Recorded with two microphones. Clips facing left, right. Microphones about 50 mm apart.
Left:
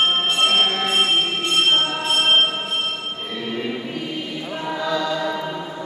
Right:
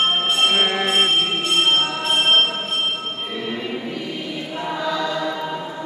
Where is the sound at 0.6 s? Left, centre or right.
Right.